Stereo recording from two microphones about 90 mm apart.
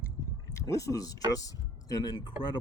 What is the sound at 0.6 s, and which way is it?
Speech, 40° left (ahead or behind).